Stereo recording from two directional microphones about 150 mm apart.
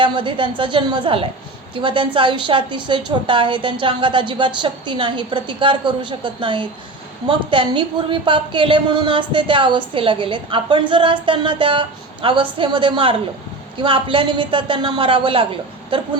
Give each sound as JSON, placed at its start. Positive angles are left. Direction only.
{"t": 0.0, "sound": "a woman's voice", "side_deg": -35}